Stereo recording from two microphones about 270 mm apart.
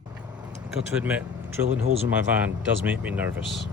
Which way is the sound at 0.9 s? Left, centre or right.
Centre.